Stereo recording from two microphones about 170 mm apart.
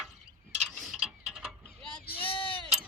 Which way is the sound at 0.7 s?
Centre (ahead or behind).